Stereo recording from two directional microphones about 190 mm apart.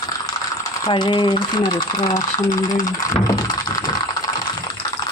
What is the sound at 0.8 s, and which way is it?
Speech, 25° left (ahead or behind).